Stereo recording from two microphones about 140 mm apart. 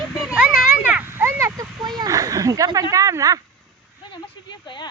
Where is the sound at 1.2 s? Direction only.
20° right (ahead or behind).